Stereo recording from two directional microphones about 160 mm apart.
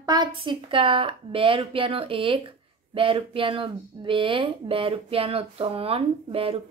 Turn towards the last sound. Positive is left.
turn(degrees=-35)  # may be behind; listen again after turning